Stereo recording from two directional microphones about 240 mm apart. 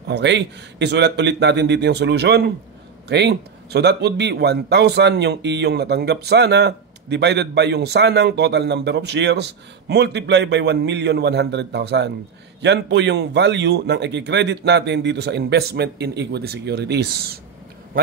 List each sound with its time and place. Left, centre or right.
0.1 s a man's voice: right